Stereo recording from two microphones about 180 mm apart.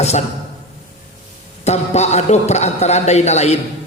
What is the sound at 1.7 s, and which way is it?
A man's voice, 40° left (ahead or behind).